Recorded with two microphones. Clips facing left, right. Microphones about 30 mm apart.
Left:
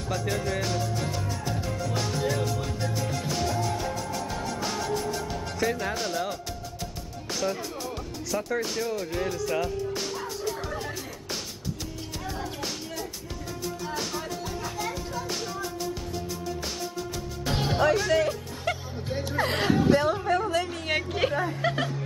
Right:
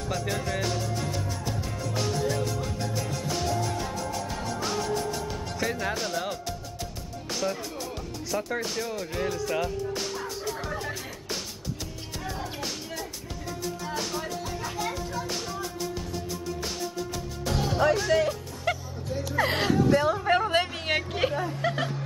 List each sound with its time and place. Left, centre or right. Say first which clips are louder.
0.1 s music: left 2 dB; centre
7.4 s music: left 1 dB; centre
12.3 s music: even; centre
17.5 s music: left 1 dB; left
17.7 s music: even; centre
19.0 s music: even; left
19.4 s music: right 1 dB; centre
19.7 s whimper: left 2 dB; left
20.0 s speech: even; centre
20.2 s a sound: right 2 dB; right
20.9 s music: left 1 dB; centre
21.4 s speech: left 1 dB; centre